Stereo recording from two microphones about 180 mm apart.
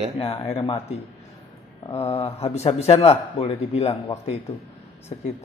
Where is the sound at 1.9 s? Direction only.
35° left (ahead or behind).